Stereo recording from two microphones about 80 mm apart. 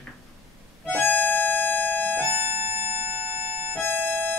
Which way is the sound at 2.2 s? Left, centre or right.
Right.